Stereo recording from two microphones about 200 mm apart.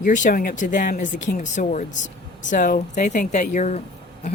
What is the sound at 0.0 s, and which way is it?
Speech, 40° left (ahead or behind).